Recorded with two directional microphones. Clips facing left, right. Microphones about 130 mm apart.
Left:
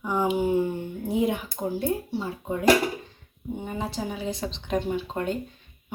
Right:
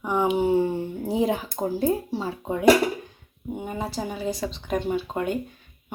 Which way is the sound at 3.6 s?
5° right (ahead or behind).